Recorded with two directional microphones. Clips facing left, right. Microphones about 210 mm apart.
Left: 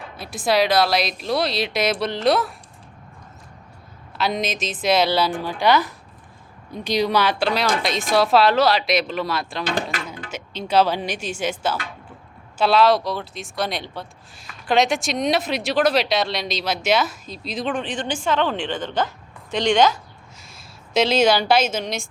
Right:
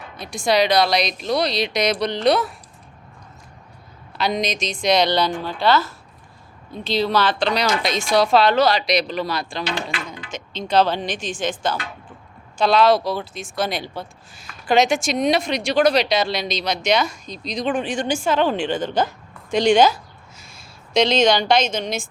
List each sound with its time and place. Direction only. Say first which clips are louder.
0.2 s speech: right 1 dB; 5° left (ahead or behind)
4.2 s speech: right 1 dB; centre (ahead or behind)
9.6 s speech: left 2 dB; 45° left (ahead or behind)
10.3 s speech: even; 10° left (ahead or behind)
17.7 s speech: right 4 dB; 10° right (ahead or behind)
20.9 s speech: right 1 dB; 5° left (ahead or behind)